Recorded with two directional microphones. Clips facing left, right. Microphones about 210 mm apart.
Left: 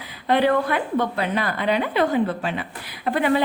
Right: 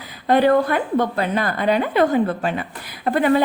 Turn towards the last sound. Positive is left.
turn(degrees=-45)  # may be behind; listen again after turning